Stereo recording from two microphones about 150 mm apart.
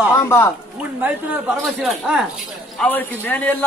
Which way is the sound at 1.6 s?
Centre (ahead or behind).